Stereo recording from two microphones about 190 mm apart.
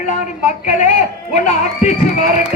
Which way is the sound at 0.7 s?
40° left (ahead or behind).